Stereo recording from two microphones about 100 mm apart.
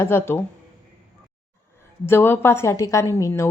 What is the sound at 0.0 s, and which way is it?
Speech, 25° left (ahead or behind).